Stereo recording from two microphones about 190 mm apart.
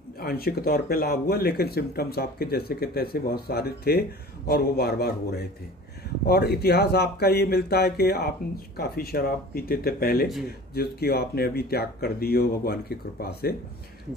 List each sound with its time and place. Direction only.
0.2 s speech: 55° left (ahead or behind)